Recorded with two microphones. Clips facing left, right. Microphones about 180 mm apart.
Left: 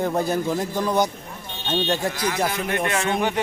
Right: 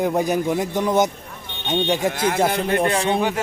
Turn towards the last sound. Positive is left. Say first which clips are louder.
# right 4 dB
turn(degrees=-30)  # may be behind; listen again after turning